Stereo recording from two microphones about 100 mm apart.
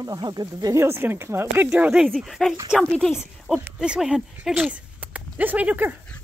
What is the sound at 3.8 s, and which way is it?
Speech, 5° right (ahead or behind).